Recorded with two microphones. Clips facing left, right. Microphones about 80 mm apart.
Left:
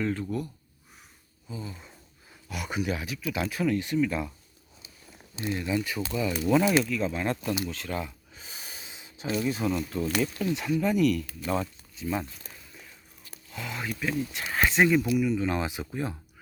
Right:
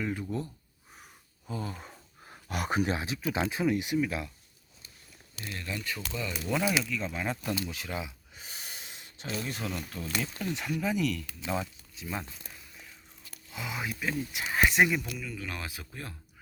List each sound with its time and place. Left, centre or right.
0.0 s speech: centre
1.5 s speech: right
2.2 s a sound: right
2.9 s speech: right
3.5 s speech: centre
5.4 s speech: left; by 7.5 s centre
7.7 s gasp: centre
9.3 s speech: centre
11.4 s a sound: centre
13.5 s speech: centre
15.2 s speech: left